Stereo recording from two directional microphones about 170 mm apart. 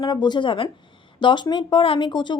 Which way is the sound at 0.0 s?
25° left (ahead or behind).